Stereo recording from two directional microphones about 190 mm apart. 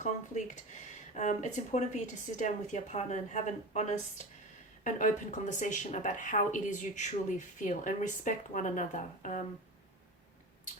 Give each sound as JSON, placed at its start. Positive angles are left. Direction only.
{"t": 0.0, "sound": "speech", "side_deg": 40}